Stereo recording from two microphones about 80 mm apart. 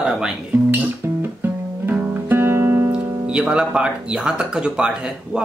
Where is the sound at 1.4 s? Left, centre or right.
Right.